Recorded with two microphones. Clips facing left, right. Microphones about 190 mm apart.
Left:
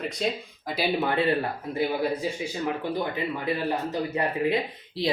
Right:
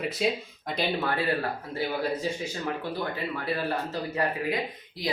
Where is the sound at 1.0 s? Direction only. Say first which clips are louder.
Left 4 dB; 20° left (ahead or behind).